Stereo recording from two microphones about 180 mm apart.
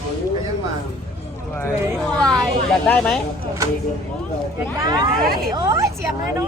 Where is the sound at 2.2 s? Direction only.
5° left (ahead or behind).